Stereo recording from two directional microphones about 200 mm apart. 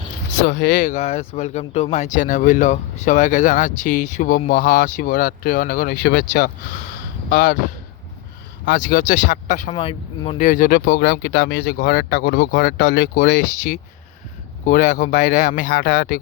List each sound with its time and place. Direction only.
0.4 s speech: 55° left (ahead or behind)
6.0 s speech: 60° left (ahead or behind)
7.3 s speech: 50° left (ahead or behind)
8.6 s speech: 45° left (ahead or behind)
9.7 s speech: 30° left (ahead or behind)
10.3 s speech: 40° left (ahead or behind)